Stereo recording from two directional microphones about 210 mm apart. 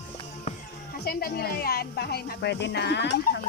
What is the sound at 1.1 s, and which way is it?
Speech, 45° left (ahead or behind).